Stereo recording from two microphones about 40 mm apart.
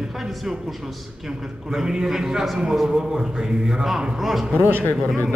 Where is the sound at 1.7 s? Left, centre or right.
Centre.